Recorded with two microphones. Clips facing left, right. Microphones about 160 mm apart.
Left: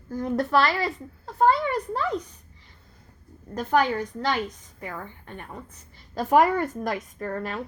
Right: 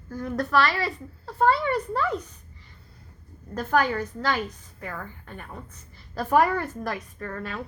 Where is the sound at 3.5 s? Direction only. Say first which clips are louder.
Left 1 dB; 15° left (ahead or behind).